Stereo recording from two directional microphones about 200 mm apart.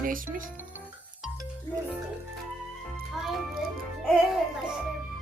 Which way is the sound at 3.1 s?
Centre (ahead or behind).